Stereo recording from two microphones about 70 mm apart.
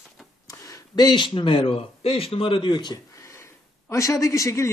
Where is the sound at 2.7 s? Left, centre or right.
Left.